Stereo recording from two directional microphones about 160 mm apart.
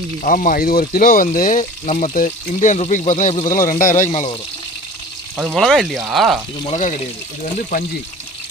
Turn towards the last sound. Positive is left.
turn(degrees=55)  # may be behind; listen again after turning